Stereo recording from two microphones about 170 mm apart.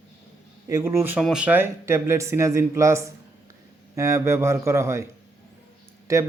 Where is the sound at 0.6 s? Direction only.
20° right (ahead or behind).